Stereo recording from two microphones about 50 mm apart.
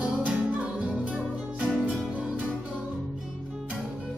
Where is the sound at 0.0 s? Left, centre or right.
Right.